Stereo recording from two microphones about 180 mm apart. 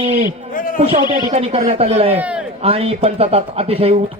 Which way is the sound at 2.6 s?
35° right (ahead or behind).